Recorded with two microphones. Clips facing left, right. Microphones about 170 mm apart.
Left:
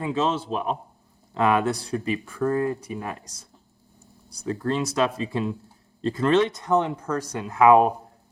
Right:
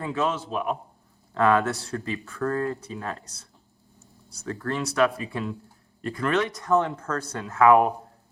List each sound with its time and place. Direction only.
0.0 s speech: 20° left (ahead or behind)
1.3 s speech: 15° left (ahead or behind)